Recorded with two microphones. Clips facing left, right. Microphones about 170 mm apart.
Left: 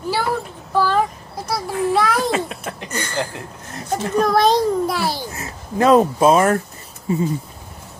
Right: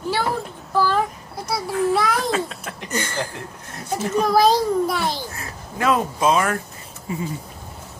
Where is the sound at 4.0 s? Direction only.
5° right (ahead or behind).